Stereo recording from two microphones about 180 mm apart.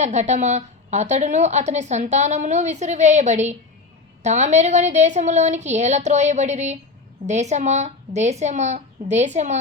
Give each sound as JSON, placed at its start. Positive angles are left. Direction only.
{"t": 0.0, "sound": "a woman's voice", "side_deg": -40}